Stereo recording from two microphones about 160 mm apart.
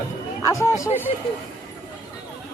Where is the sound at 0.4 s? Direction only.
20° left (ahead or behind).